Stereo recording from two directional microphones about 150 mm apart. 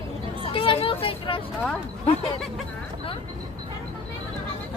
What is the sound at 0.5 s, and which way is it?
Vehicle, 35° left (ahead or behind).